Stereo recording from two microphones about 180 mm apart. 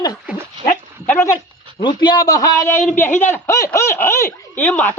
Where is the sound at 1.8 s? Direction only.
25° left (ahead or behind).